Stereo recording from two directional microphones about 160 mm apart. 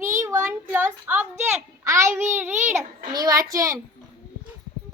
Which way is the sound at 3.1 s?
25° right (ahead or behind).